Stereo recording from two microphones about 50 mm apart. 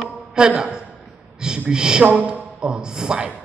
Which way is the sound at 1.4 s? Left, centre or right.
Centre.